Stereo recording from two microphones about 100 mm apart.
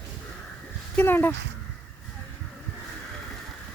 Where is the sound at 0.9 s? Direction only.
20° left (ahead or behind).